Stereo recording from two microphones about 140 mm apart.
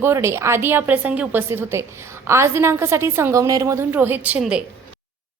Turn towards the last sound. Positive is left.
turn(degrees=-5)  # may be behind; listen again after turning